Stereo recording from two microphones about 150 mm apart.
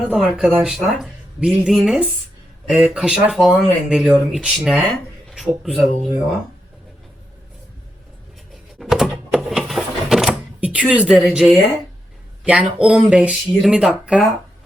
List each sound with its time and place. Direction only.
0.1 s speech: 5° right (ahead or behind)
8.8 s a sound: centre (ahead or behind)
12.5 s speech: 5° right (ahead or behind)